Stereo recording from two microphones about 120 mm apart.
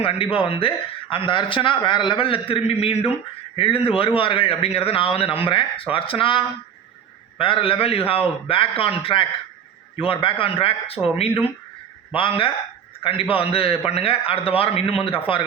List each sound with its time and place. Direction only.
0.0 s a man's voice: 50° left (ahead or behind)